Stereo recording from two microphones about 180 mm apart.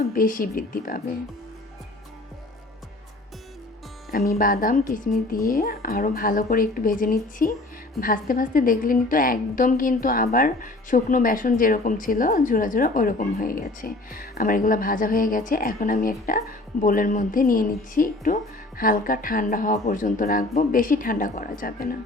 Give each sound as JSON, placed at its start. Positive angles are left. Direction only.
{"t": 0.1, "sound": "a woman's voice", "side_deg": 50}
{"t": 4.1, "sound": "a woman's voice", "side_deg": 55}